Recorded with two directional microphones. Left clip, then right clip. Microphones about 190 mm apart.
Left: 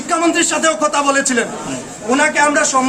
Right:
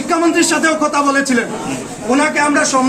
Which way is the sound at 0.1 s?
10° left (ahead or behind).